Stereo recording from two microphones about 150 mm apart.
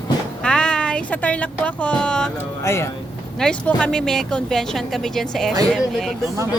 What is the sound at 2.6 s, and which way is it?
Speech, 20° left (ahead or behind).